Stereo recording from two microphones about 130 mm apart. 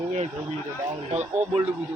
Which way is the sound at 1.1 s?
60° right (ahead or behind).